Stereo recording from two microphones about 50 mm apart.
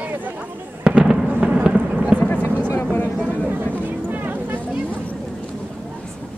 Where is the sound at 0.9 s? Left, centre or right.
Right.